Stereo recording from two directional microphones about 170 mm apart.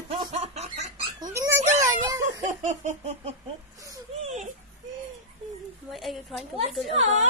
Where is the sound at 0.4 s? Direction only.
40° right (ahead or behind).